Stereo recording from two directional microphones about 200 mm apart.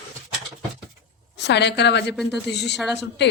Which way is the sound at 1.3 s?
60° left (ahead or behind).